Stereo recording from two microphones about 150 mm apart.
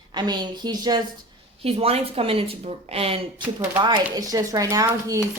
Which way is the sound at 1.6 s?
40° right (ahead or behind).